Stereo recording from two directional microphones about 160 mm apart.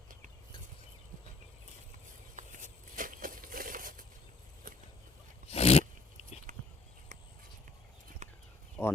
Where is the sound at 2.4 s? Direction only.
50° right (ahead or behind).